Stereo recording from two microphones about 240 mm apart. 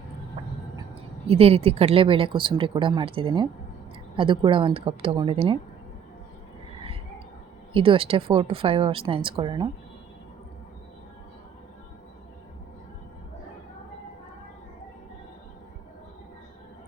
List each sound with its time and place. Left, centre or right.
1.3 s speech: right
7.7 s speech: right